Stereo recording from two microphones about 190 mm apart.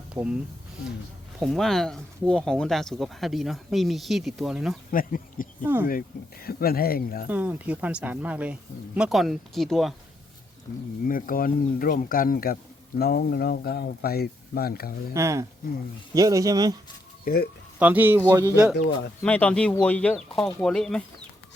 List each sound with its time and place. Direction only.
0.1 s speech: 5° right (ahead or behind)
1.4 s speech: centre (ahead or behind)
4.9 s speech: 45° left (ahead or behind)
5.6 s speech: 10° right (ahead or behind)
6.4 s speech: 50° left (ahead or behind)
7.3 s speech: 10° right (ahead or behind)
11.0 s speech: 45° left (ahead or behind)
15.1 s speech: 15° right (ahead or behind)
17.2 s speech: 55° left (ahead or behind)
17.7 s speech: 10° right (ahead or behind)
19.2 s speech: 5° left (ahead or behind)